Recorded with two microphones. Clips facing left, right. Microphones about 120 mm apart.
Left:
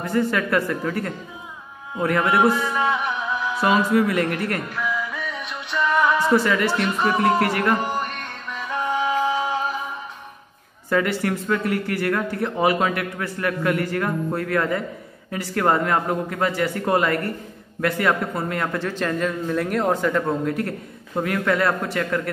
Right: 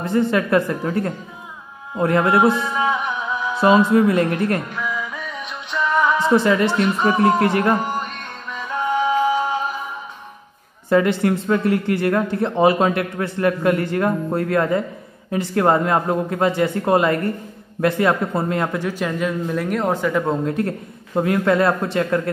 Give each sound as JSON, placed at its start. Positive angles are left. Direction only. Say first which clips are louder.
{"t": 0.0, "sound": "a man's voice", "louder": "right 3 dB", "side_deg": -25}
{"t": 2.5, "sound": "music", "louder": "right 1 dB", "side_deg": 0}
{"t": 3.6, "sound": "a man's voice", "louder": "right 5 dB", "side_deg": -25}
{"t": 4.7, "sound": "music", "louder": "even", "side_deg": 5}
{"t": 6.3, "sound": "a man's voice", "louder": "right 3 dB", "side_deg": -20}
{"t": 8.5, "sound": "music", "louder": "right 2 dB", "side_deg": 5}
{"t": 9.1, "sound": "music", "louder": "right 3 dB", "side_deg": -10}
{"t": 10.9, "sound": "a man's voice", "louder": "right 5 dB", "side_deg": -25}
{"t": 20.2, "sound": "a man's voice", "louder": "right 3 dB", "side_deg": -25}